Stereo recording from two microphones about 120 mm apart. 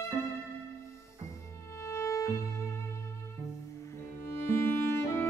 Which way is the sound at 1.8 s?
25° left (ahead or behind).